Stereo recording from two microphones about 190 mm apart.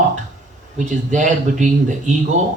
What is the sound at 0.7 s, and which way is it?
Speech, 40° right (ahead or behind).